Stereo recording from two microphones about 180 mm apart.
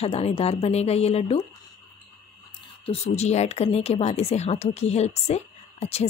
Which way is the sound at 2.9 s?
35° left (ahead or behind).